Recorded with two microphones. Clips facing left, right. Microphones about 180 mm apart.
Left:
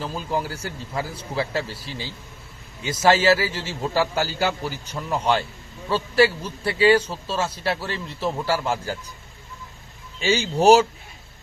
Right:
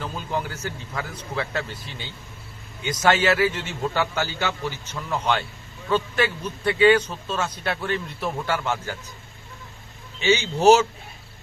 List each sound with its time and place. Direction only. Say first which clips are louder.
0.3 s a man's voice: left 1 dB; 35° left (ahead or behind)
10.2 s a man's voice: even; 35° left (ahead or behind)